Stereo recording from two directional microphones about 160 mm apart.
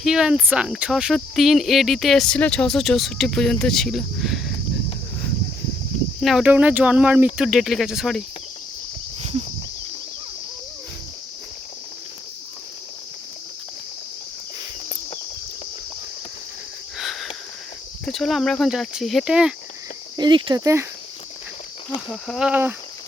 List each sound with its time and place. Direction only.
0.0 s speech: 5° right (ahead or behind)
6.1 s speech: centre (ahead or behind)
17.0 s a sound: centre (ahead or behind)
18.0 s speech: centre (ahead or behind)
20.1 s speech: 30° right (ahead or behind)
22.1 s speech: centre (ahead or behind)